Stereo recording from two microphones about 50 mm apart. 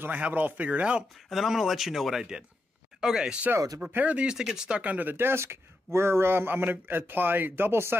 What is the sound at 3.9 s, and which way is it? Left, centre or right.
Speech, right.